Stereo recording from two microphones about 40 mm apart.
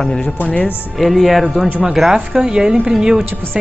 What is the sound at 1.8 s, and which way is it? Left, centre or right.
Speech, centre.